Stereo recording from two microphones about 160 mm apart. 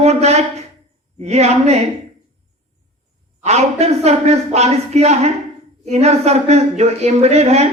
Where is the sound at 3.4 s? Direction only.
45° right (ahead or behind).